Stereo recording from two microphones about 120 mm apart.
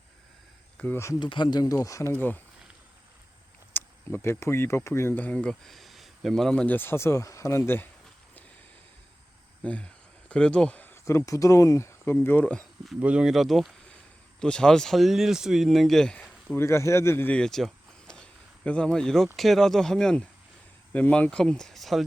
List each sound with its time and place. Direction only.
0.8 s speech: 20° left (ahead or behind)
1.2 s speech: 40° left (ahead or behind); by 2.4 s 15° left (ahead or behind)
3.7 s speech: 20° left (ahead or behind)
9.6 s a sound: 10° left (ahead or behind)
11.3 s speech: 25° left (ahead or behind)
13.0 s speech: 10° right (ahead or behind)
16.6 s speech: 25° left (ahead or behind); by 22.0 s centre (ahead or behind)